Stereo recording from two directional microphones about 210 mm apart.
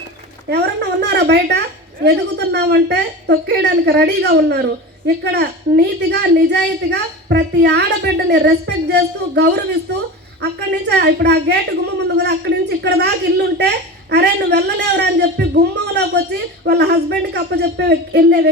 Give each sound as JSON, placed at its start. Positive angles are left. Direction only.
{"t": 0.5, "sound": "a woman's voice", "side_deg": -50}